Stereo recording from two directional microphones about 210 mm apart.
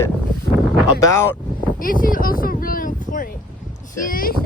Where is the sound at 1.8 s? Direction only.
40° left (ahead or behind).